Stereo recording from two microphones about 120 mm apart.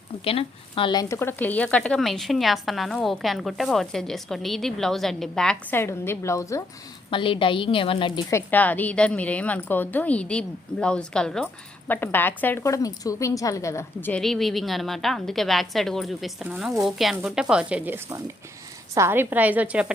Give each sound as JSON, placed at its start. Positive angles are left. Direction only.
{"t": 0.3, "sound": "a woman's voice", "side_deg": 50}
{"t": 1.0, "sound": "speech", "side_deg": 20}
{"t": 5.7, "sound": "a woman's voice", "side_deg": 20}
{"t": 7.1, "sound": "a woman's voice", "side_deg": 45}
{"t": 8.3, "sound": "a woman's voice", "side_deg": 20}
{"t": 11.9, "sound": "a woman's voice", "side_deg": 15}
{"t": 14.1, "sound": "speech", "side_deg": 5}